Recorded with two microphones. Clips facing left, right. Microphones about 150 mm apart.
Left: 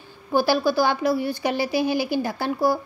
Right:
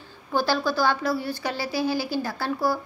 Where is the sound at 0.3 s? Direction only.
10° left (ahead or behind).